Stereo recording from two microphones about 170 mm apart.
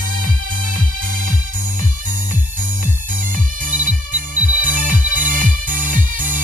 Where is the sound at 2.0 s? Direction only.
50° right (ahead or behind).